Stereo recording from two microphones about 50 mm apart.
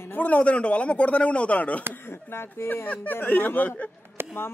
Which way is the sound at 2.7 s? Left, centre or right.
Left.